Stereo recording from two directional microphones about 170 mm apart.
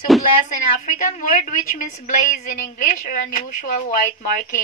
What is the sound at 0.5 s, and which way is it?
A woman's voice, 50° left (ahead or behind).